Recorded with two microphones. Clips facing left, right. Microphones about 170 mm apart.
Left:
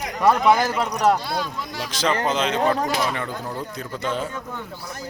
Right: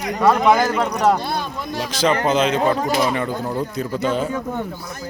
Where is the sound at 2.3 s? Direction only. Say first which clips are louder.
Right 5 dB; 5° right (ahead or behind).